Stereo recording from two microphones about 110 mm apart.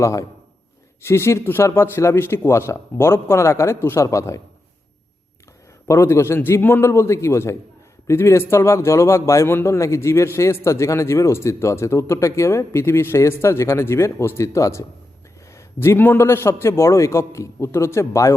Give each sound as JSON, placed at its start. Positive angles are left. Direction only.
{"t": 0.0, "sound": "a man's voice", "side_deg": 30}
{"t": 5.9, "sound": "a man's voice", "side_deg": 25}